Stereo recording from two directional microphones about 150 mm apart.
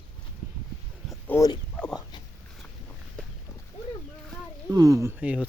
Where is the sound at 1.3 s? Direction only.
10° left (ahead or behind).